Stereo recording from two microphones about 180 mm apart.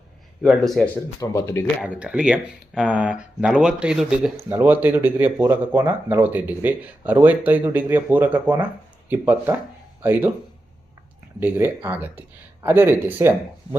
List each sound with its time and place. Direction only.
0.4 s speech: centre (ahead or behind)
1.2 s speech: 20° left (ahead or behind)
1.8 s speech: 5° right (ahead or behind)
11.3 s speech: 10° right (ahead or behind)